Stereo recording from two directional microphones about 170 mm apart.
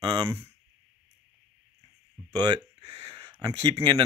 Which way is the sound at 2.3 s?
25° right (ahead or behind).